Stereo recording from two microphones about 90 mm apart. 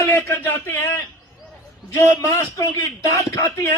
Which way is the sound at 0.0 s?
25° left (ahead or behind).